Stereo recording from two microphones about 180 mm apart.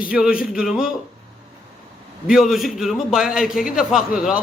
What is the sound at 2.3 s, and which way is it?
A man's voice, centre (ahead or behind).